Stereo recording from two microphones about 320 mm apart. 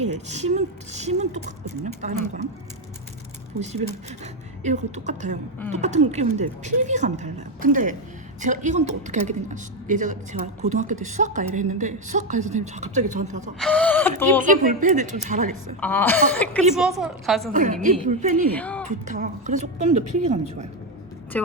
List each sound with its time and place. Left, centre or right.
0.0 s a woman's voice: right
3.6 s a woman's voice: right
13.6 s speech: centre
14.4 s a woman's voice: right
15.8 s speech: centre
17.5 s a woman's voice: right
18.5 s speech: centre
18.9 s a woman's voice: right
21.3 s speech: centre